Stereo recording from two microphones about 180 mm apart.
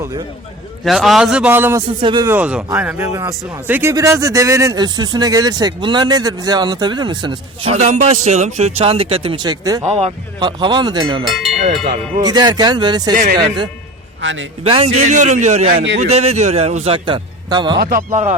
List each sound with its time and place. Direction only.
0.9 s a man's voice: centre (ahead or behind)
2.0 s speech: 25° right (ahead or behind)
2.2 s speech: 10° right (ahead or behind)
7.7 s a man's voice: 35° right (ahead or behind); by 9.8 s 20° right (ahead or behind)
9.8 s speech: 35° right (ahead or behind)
11.3 s a man's voice: centre (ahead or behind)
12.2 s speech: 20° right (ahead or behind)
14.2 s a man's voice: 90° right
14.6 s a man's voice: 30° right (ahead or behind)
17.7 s speech: 50° right (ahead or behind)